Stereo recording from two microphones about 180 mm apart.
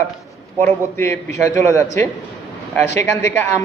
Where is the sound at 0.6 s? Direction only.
15° left (ahead or behind).